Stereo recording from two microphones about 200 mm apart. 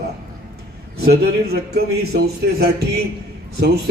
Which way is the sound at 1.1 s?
55° right (ahead or behind).